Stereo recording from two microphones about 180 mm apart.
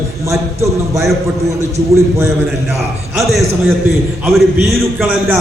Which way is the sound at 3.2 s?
Centre (ahead or behind).